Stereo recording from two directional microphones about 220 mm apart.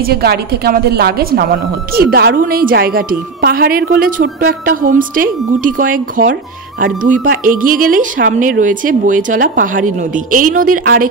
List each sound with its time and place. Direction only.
0.0 s a woman's voice: 45° right (ahead or behind)